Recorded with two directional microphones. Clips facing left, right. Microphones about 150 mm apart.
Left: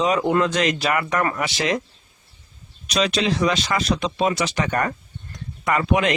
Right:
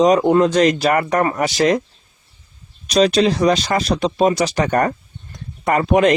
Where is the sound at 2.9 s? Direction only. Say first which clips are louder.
Right 7 dB; 35° right (ahead or behind).